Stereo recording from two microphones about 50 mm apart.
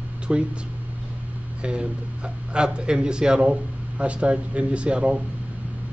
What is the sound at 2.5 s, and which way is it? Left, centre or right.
Speech, centre.